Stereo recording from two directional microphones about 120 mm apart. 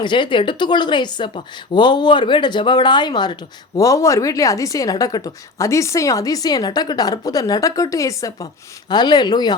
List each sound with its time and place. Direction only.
0.0 s speech: 40° left (ahead or behind)
3.8 s a woman's voice: 25° left (ahead or behind)